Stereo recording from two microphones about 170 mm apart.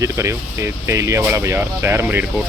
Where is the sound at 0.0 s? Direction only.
15° right (ahead or behind).